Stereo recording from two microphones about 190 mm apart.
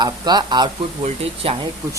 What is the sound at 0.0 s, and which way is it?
Speech, 20° right (ahead or behind).